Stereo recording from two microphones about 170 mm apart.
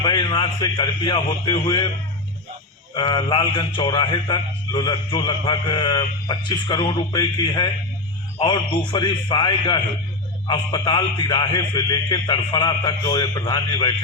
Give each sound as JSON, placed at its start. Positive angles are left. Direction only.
{"t": 0.0, "sound": "a man's voice", "side_deg": 30}
{"t": 2.9, "sound": "a man's voice", "side_deg": 30}